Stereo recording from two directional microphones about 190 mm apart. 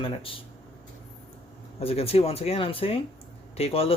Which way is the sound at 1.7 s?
30° left (ahead or behind).